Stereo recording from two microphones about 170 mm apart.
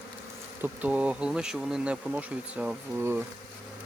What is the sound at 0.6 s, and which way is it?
Speech, 10° right (ahead or behind).